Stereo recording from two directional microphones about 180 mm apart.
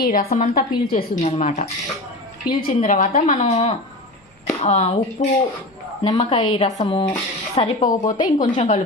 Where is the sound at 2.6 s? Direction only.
45° left (ahead or behind); by 7.9 s 30° left (ahead or behind).